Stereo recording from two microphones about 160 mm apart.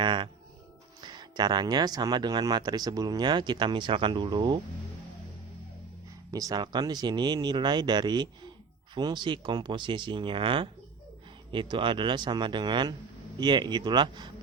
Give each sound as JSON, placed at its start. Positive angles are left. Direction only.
{"t": 0.0, "sound": "a sound", "side_deg": -30}
{"t": 1.0, "sound": "speech", "side_deg": -25}
{"t": 6.3, "sound": "speech", "side_deg": -20}